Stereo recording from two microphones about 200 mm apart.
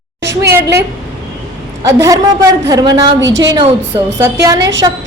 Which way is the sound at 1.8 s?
15° right (ahead or behind).